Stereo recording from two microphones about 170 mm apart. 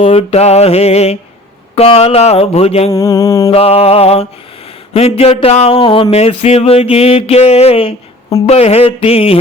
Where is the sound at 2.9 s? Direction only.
20° left (ahead or behind).